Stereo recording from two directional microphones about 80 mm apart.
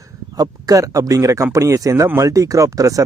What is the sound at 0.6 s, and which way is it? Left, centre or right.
A man's voice, right.